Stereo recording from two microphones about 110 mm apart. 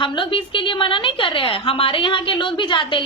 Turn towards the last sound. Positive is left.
turn(degrees=50)  # may be behind; listen again after turning